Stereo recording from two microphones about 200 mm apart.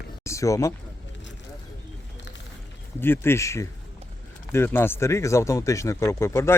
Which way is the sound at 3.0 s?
10° left (ahead or behind).